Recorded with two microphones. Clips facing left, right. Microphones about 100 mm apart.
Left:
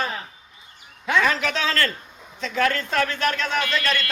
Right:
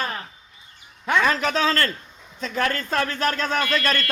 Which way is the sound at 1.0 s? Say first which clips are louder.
Right 1 dB; 40° right (ahead or behind).